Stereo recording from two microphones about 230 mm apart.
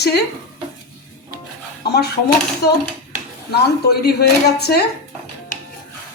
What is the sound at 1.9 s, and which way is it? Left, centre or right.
Speech, left.